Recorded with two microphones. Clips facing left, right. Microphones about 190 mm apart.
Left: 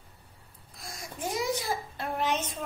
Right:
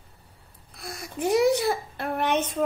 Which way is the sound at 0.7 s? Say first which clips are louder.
Right 7 dB; 65° right (ahead or behind).